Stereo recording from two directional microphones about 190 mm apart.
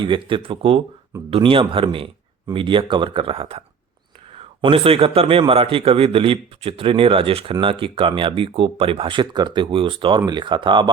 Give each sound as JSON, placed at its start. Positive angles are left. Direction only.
{"t": 0.0, "sound": "a man's voice", "side_deg": -25}